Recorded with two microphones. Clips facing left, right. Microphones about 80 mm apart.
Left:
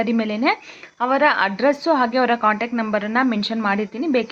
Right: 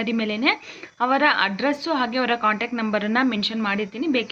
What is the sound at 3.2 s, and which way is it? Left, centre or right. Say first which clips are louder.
Speech: left 3 dB; left.